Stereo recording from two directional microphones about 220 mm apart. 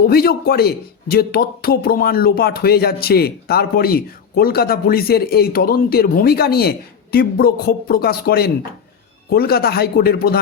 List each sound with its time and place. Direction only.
0.0 s a man's voice: 45° left (ahead or behind)